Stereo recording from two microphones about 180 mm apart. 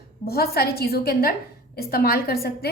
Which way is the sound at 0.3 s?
60° left (ahead or behind).